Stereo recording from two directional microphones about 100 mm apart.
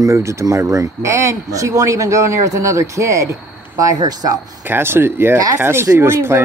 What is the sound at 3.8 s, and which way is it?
Speech, 40° right (ahead or behind).